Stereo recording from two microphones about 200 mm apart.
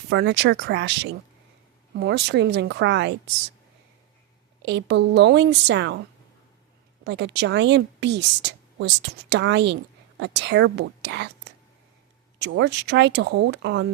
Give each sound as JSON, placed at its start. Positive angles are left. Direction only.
{"t": 0.1, "sound": "a woman's voice", "side_deg": -60}
{"t": 4.6, "sound": "a woman's voice", "side_deg": -60}
{"t": 7.0, "sound": "a woman's voice", "side_deg": -60}
{"t": 12.4, "sound": "a woman's voice", "side_deg": -60}